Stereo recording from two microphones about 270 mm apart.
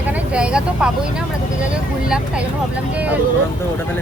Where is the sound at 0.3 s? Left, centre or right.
Centre.